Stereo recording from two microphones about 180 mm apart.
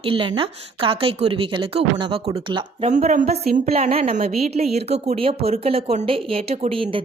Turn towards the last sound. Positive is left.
turn(degrees=-30)  # may be behind; listen again after turning